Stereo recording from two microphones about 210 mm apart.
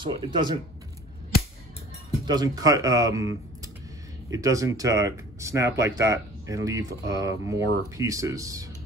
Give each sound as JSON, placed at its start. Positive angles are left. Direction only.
{"t": 0.0, "sound": "speech", "side_deg": -25}
{"t": 2.2, "sound": "speech", "side_deg": -20}
{"t": 4.3, "sound": "speech", "side_deg": -15}